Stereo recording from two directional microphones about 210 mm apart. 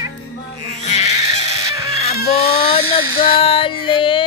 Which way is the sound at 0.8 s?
35° left (ahead or behind).